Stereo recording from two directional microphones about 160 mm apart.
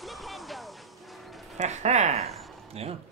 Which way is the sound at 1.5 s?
45° right (ahead or behind).